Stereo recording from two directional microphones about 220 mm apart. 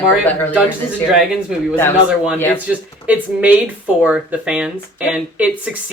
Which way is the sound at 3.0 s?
5° right (ahead or behind).